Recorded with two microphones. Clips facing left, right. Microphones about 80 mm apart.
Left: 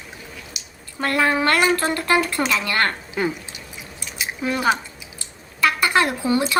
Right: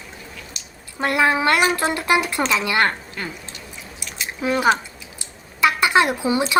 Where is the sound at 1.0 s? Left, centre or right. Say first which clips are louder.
Right 1 dB; centre.